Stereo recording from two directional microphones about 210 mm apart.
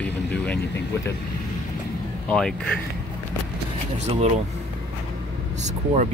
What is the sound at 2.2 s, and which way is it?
Speech, 5° left (ahead or behind).